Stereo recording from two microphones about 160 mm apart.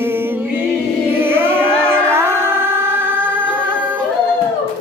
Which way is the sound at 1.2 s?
15° right (ahead or behind).